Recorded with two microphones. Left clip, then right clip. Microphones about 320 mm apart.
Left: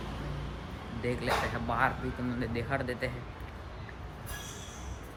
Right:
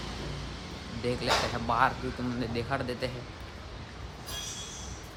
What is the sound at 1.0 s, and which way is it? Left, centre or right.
Speech, centre.